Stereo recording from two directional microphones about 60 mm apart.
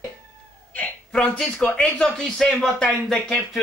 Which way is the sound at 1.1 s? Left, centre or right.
Centre.